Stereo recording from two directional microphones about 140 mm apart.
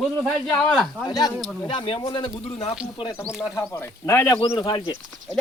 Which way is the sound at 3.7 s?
20° left (ahead or behind).